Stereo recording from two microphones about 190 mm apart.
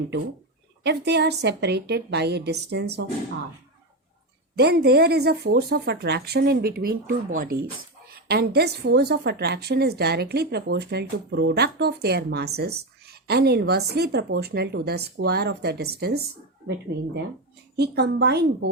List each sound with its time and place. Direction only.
0.9 s a woman's voice: 60° right (ahead or behind)
4.5 s a woman's voice: 55° right (ahead or behind)